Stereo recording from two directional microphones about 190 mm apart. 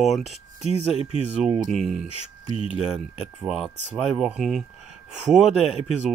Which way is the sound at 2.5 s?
30° left (ahead or behind).